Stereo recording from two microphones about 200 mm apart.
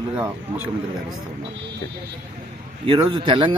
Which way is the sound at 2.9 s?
25° right (ahead or behind).